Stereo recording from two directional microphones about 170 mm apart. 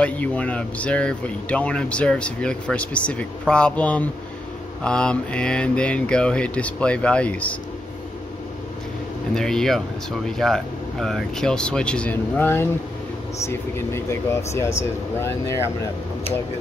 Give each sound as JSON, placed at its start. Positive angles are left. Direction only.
{"t": 0.0, "sound": "speech", "side_deg": 10}
{"t": 9.3, "sound": "speech", "side_deg": 5}